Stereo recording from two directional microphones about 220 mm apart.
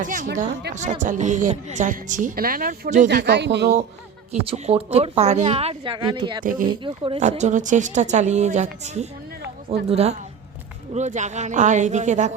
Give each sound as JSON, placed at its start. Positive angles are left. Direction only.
{"t": 0.0, "sound": "speech", "side_deg": -35}
{"t": 4.3, "sound": "speech", "side_deg": -30}
{"t": 6.4, "sound": "speech", "side_deg": -40}
{"t": 6.7, "sound": "speech", "side_deg": -20}